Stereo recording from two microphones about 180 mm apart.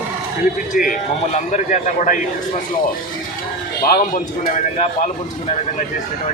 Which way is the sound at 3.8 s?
50° left (ahead or behind).